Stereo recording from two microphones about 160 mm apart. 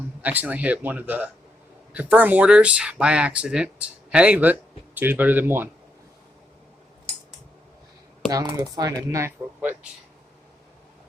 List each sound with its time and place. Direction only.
0.2 s speech: 10° right (ahead or behind)
8.3 s speech: 20° right (ahead or behind)